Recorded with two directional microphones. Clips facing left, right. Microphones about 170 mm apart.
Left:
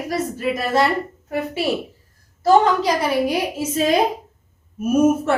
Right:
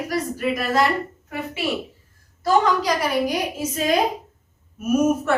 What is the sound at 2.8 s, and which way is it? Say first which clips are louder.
A woman's voice: left 2 dB; 30° left (ahead or behind).